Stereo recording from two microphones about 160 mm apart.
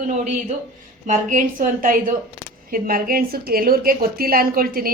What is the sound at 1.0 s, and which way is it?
A woman's voice, 55° right (ahead or behind).